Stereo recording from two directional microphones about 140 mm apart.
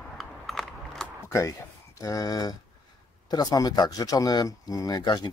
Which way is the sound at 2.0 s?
25° left (ahead or behind).